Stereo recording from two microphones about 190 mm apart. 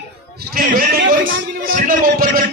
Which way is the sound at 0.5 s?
50° right (ahead or behind).